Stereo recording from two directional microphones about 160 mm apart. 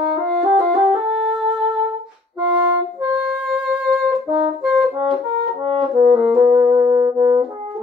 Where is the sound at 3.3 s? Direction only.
Centre (ahead or behind).